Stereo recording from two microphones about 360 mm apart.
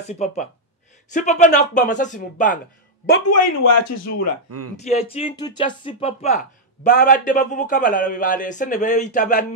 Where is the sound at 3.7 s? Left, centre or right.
Left.